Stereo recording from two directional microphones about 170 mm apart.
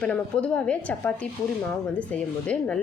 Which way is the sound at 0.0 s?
5° left (ahead or behind).